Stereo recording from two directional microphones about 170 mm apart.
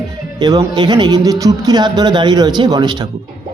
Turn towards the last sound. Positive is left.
turn(degrees=-25)  # may be behind; listen again after turning